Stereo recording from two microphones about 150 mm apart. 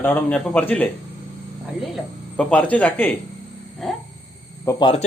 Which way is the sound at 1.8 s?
Centre (ahead or behind).